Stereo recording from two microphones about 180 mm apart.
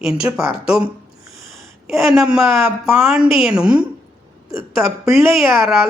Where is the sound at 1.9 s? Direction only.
Centre (ahead or behind).